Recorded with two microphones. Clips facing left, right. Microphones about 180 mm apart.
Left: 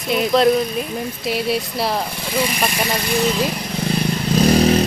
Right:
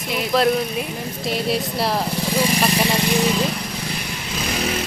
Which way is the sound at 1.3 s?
Centre (ahead or behind).